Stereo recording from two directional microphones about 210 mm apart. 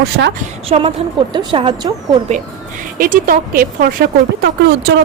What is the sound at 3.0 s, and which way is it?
Speech, 40° right (ahead or behind).